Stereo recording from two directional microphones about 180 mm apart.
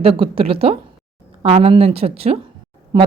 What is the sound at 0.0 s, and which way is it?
Speech, 30° right (ahead or behind).